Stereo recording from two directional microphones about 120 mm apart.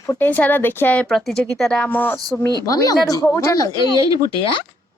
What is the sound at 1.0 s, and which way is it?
Speech, centre (ahead or behind).